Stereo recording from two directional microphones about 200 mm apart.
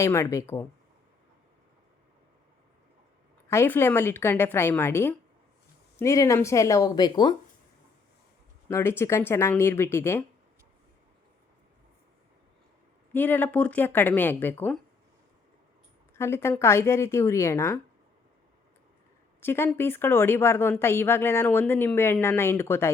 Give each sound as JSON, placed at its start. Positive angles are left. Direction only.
{"t": 0.0, "sound": "speech", "side_deg": 15}
{"t": 3.5, "sound": "speech", "side_deg": 10}
{"t": 8.6, "sound": "speech", "side_deg": 10}
{"t": 13.1, "sound": "speech", "side_deg": 10}
{"t": 16.1, "sound": "speech", "side_deg": 15}
{"t": 19.4, "sound": "speech", "side_deg": 10}